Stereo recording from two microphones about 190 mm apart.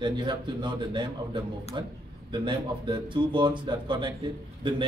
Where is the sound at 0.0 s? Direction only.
25° right (ahead or behind).